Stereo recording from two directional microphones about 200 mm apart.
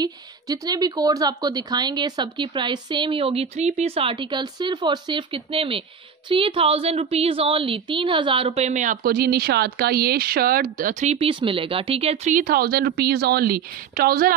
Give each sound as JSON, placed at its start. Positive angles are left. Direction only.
{"t": 0.0, "sound": "speech", "side_deg": -20}